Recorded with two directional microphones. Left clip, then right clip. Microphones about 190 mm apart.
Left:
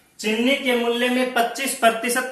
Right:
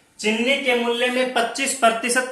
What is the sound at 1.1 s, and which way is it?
Speech, 15° right (ahead or behind).